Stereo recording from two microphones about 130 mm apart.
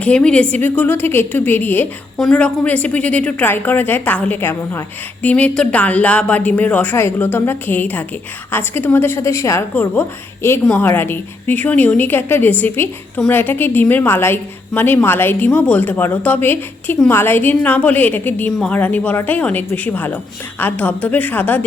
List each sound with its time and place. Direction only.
0.0 s a woman's voice: 10° left (ahead or behind)